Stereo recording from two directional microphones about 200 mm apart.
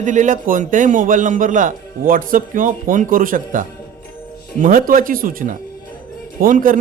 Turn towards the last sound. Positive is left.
turn(degrees=-40)  # may be behind; listen again after turning